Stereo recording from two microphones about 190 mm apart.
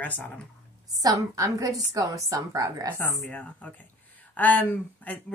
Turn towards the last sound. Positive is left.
turn(degrees=10)  # may be behind; listen again after turning